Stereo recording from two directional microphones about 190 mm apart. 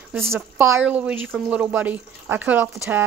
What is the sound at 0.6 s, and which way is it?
Speech, 10° right (ahead or behind).